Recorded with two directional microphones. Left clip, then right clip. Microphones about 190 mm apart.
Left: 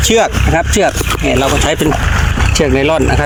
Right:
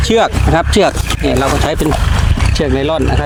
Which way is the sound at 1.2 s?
10° right (ahead or behind).